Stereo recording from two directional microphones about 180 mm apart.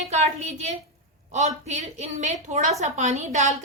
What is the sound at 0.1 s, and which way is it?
Speech, 35° right (ahead or behind).